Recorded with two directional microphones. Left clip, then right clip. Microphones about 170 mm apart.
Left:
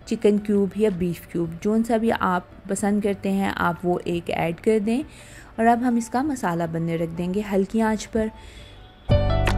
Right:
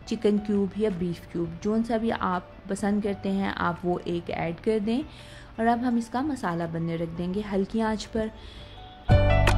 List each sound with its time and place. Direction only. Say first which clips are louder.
0.1 s speech: left 5 dB; 15° left (ahead or behind)